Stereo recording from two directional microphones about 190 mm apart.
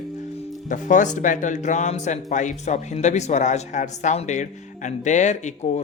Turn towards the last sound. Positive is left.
turn(degrees=40)  # may be behind; listen again after turning